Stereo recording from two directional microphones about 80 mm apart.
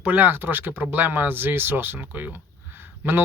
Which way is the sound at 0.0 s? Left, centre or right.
Right.